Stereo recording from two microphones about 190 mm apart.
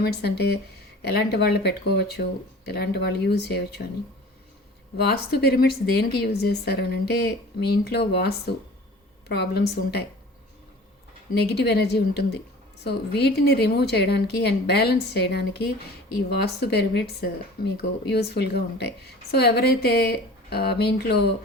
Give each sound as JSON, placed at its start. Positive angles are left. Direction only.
{"t": 0.0, "sound": "a woman's voice", "side_deg": 60}
{"t": 4.9, "sound": "a woman's voice", "side_deg": 55}
{"t": 11.3, "sound": "a woman's voice", "side_deg": 60}